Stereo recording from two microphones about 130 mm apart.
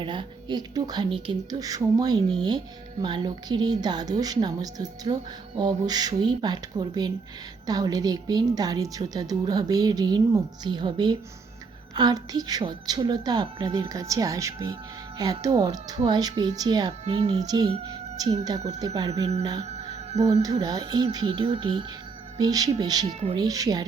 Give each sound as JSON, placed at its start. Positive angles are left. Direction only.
{"t": 0.0, "sound": "a woman's voice", "side_deg": -35}
{"t": 19.6, "sound": "music", "side_deg": -55}
{"t": 20.4, "sound": "a woman's voice", "side_deg": -30}